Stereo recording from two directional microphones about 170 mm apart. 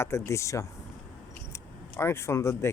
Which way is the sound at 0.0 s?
15° left (ahead or behind).